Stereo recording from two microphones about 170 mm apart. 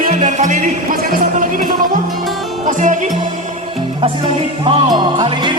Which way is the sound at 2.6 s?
50° right (ahead or behind).